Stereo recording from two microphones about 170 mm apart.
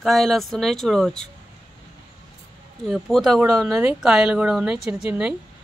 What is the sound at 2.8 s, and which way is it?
A woman's voice, centre (ahead or behind).